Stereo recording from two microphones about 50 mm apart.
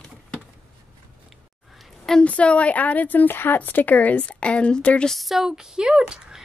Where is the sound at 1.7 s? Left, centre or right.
Centre.